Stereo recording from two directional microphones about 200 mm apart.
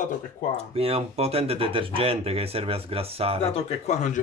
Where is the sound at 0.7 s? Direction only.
30° right (ahead or behind).